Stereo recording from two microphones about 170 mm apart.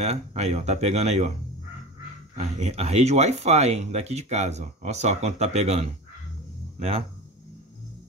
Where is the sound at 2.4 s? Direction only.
40° right (ahead or behind).